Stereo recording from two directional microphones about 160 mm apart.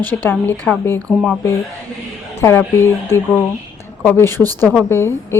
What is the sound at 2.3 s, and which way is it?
A woman's voice, 15° left (ahead or behind).